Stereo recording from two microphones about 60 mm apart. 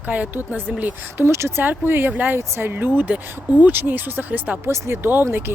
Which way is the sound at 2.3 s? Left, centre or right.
Right.